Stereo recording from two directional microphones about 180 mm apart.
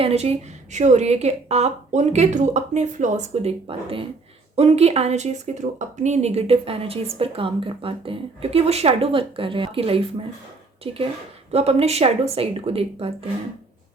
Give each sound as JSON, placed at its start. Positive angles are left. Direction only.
{"t": 0.0, "sound": "speech", "side_deg": -35}